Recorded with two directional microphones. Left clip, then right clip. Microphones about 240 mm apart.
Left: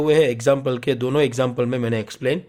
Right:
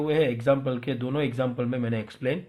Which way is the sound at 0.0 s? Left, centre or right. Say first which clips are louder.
Left 7 dB; left.